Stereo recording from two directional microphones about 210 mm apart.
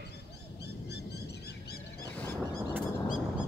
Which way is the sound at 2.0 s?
10° left (ahead or behind).